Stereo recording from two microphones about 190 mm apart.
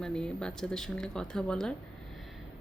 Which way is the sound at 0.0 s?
5° left (ahead or behind).